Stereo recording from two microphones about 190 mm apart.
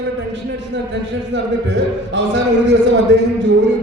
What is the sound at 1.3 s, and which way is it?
A man's voice, 70° right (ahead or behind).